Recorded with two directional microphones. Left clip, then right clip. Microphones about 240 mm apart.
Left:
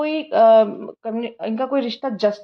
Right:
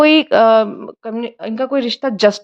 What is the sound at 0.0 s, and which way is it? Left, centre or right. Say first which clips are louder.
A woman's voice: right 5 dB; right.